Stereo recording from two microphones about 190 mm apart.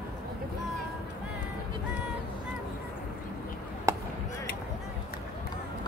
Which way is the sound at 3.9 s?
15° right (ahead or behind).